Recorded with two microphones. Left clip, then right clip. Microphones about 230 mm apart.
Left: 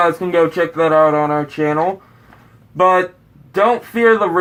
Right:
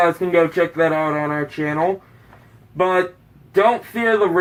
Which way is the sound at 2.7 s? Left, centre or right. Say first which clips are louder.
Left 5 dB; left.